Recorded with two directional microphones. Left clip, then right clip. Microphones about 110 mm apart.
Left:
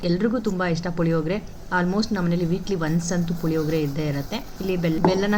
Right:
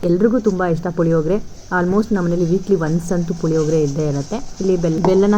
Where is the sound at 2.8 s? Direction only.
20° right (ahead or behind).